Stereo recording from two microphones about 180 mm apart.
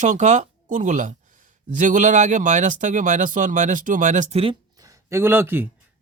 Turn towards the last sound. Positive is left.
turn(degrees=-10)  # may be behind; listen again after turning